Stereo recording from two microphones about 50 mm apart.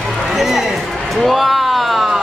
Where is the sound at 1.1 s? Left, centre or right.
Centre.